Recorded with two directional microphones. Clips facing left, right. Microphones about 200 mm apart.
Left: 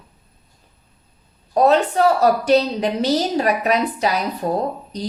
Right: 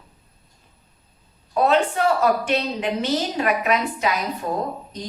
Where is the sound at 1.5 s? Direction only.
40° left (ahead or behind).